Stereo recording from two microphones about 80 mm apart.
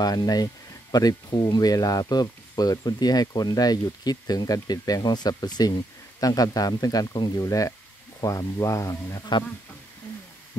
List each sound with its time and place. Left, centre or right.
0.0 s speech: left